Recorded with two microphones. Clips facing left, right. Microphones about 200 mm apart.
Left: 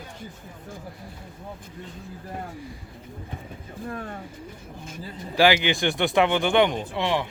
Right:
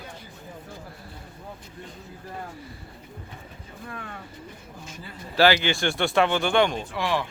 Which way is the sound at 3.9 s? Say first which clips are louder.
Left 5 dB; 35° left (ahead or behind).